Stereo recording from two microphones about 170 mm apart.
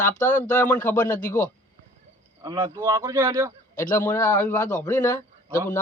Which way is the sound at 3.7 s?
50° left (ahead or behind).